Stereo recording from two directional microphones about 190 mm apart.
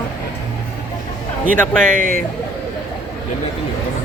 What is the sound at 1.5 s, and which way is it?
Speech, 5° left (ahead or behind).